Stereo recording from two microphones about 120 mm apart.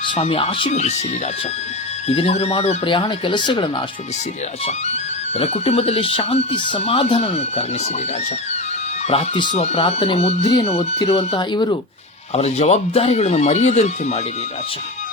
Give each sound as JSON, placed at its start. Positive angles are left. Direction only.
{"t": 0.1, "sound": "speech", "side_deg": 55}
{"t": 0.7, "sound": "speech", "side_deg": 70}
{"t": 2.0, "sound": "speech", "side_deg": 60}
{"t": 4.6, "sound": "speech", "side_deg": 60}
{"t": 9.5, "sound": "speech", "side_deg": 65}
{"t": 11.5, "sound": "speech", "side_deg": 40}
{"t": 12.3, "sound": "speech", "side_deg": 60}